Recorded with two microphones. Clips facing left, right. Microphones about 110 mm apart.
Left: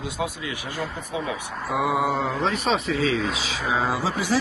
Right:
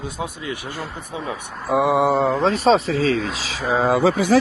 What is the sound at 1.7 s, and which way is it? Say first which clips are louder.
Speech: right 6 dB; 30° right (ahead or behind).